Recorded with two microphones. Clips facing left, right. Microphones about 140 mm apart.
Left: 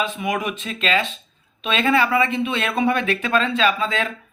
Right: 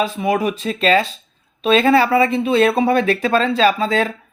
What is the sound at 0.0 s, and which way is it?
Speech, 35° right (ahead or behind).